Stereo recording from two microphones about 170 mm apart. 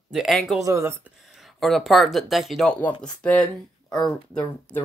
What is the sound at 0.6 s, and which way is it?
Speech, 15° right (ahead or behind).